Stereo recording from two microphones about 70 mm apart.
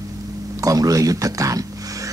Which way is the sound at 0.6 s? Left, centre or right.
Right.